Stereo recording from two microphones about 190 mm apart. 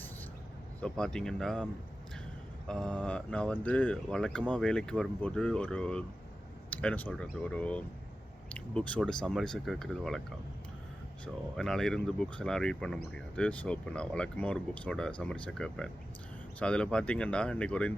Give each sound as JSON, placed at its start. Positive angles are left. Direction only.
{"t": 0.8, "sound": "speech", "side_deg": 5}
{"t": 2.6, "sound": "speech", "side_deg": 5}
{"t": 11.5, "sound": "speech", "side_deg": 5}